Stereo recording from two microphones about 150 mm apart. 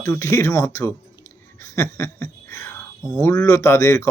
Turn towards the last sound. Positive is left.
turn(degrees=20)  # may be behind; listen again after turning